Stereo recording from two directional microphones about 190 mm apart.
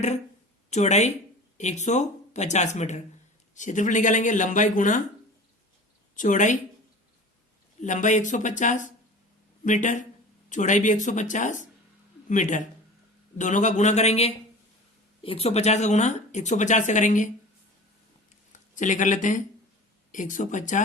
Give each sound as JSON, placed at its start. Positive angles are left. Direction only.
{"t": 0.7, "sound": "speech", "side_deg": 35}
{"t": 6.1, "sound": "speech", "side_deg": 40}
{"t": 7.8, "sound": "speech", "side_deg": 40}
{"t": 18.5, "sound": "speech", "side_deg": 40}